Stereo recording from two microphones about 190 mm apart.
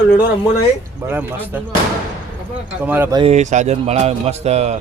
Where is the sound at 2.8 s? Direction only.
10° right (ahead or behind).